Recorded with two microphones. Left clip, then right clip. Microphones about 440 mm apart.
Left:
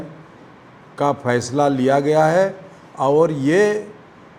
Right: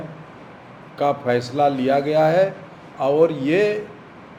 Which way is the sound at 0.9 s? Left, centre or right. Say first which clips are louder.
Left 1 dB; left.